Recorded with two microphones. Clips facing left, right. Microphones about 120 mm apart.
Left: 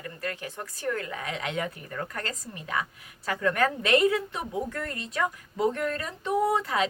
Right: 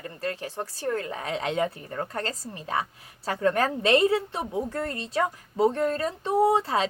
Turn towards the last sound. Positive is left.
turn(degrees=-30)  # may be behind; listen again after turning